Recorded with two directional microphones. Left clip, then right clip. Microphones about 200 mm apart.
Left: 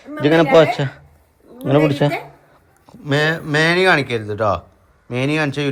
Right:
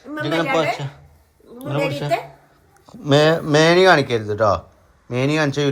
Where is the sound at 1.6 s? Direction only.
35° left (ahead or behind).